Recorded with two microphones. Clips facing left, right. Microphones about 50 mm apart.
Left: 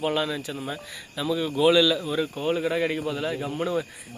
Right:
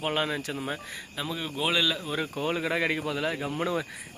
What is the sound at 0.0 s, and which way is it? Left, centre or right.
Speech, right.